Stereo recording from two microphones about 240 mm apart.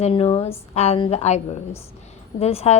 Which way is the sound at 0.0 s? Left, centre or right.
Left.